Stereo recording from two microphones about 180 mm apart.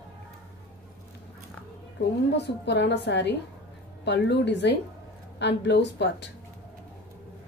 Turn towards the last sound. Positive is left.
turn(degrees=75)  # may be behind; listen again after turning